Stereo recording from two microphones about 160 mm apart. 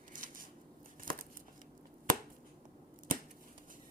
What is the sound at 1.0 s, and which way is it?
Crumpling, 60° right (ahead or behind).